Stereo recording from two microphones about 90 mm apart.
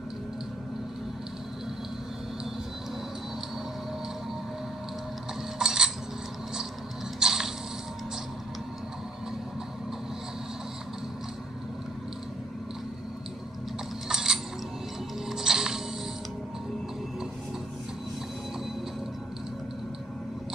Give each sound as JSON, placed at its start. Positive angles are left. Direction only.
{"t": 5.6, "sound": "a sound", "side_deg": -5}
{"t": 7.2, "sound": "mechanisms", "side_deg": -5}
{"t": 14.0, "sound": "mechanisms", "side_deg": -5}
{"t": 15.2, "sound": "music", "side_deg": -5}